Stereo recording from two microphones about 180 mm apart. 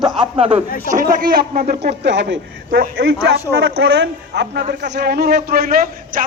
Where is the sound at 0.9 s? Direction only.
50° right (ahead or behind).